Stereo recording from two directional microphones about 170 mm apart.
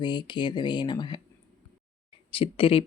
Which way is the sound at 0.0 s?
25° left (ahead or behind).